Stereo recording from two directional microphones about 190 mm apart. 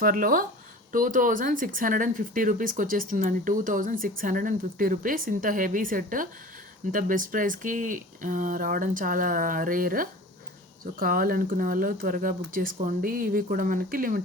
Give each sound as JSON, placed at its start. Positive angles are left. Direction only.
{"t": 0.0, "sound": "speech", "side_deg": -45}